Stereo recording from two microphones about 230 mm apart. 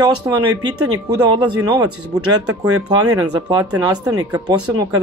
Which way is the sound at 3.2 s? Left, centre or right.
Centre.